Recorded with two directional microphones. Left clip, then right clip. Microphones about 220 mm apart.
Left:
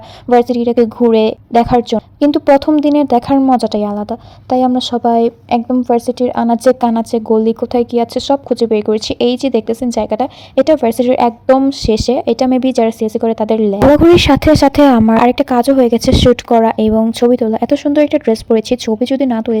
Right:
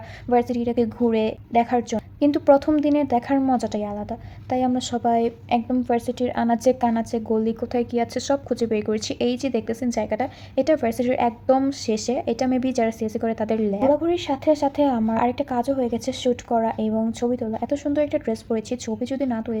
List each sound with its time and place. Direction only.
0.3 s a woman's voice: 30° left (ahead or behind)
14.0 s speech: 45° left (ahead or behind)